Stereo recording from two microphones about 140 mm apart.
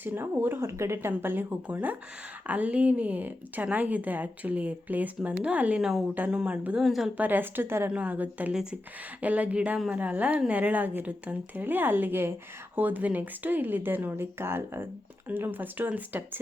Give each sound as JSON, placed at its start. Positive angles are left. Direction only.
{"t": 0.0, "sound": "speech", "side_deg": -15}
{"t": 7.2, "sound": "speech", "side_deg": -15}